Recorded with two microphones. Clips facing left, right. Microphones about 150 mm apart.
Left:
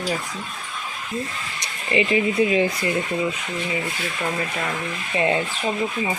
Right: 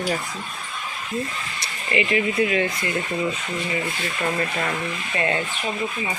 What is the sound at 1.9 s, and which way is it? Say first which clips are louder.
Speech: left 2 dB; 30° left (ahead or behind).